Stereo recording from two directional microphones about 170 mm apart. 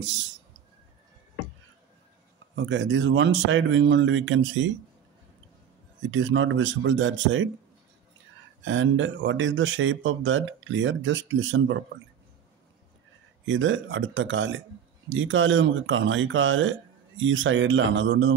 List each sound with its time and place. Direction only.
0.0 s speech: 90° right
2.5 s speech: 90° right
6.0 s speech: 90° right
8.6 s speech: 90° right
13.5 s speech: 90° right